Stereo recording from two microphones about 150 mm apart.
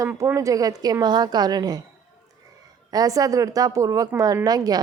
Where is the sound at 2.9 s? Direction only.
25° right (ahead or behind).